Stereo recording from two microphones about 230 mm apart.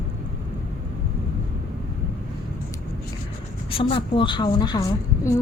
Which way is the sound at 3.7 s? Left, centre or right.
Left.